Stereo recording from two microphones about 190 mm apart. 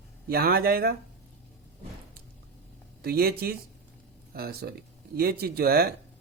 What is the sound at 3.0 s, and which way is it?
Speech, 55° right (ahead or behind).